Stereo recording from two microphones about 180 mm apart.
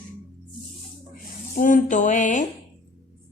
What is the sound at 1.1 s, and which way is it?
Speech, 45° left (ahead or behind).